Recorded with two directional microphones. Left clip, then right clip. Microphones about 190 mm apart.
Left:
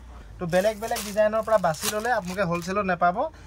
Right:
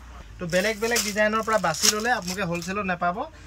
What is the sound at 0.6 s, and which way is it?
Speech, 35° left (ahead or behind).